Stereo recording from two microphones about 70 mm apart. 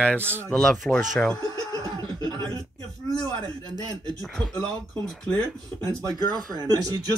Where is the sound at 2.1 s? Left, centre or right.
Right.